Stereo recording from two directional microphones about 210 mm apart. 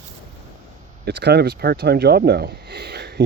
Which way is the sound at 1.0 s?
50° right (ahead or behind).